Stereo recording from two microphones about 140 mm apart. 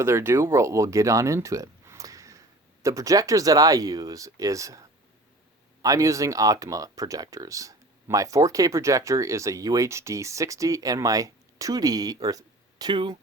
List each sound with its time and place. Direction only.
0.0 s speech: 15° right (ahead or behind)
5.8 s speech: 25° right (ahead or behind)